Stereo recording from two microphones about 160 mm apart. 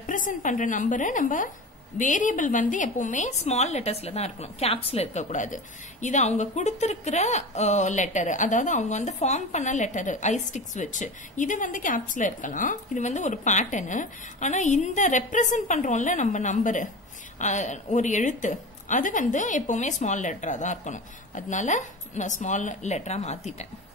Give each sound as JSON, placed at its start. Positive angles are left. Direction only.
{"t": 0.0, "sound": "a woman's voice", "side_deg": 55}